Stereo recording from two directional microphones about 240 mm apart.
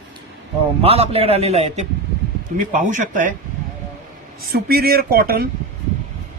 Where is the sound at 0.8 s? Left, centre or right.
Right.